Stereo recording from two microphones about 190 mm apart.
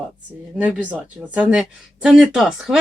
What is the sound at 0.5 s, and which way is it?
Speech, 5° right (ahead or behind).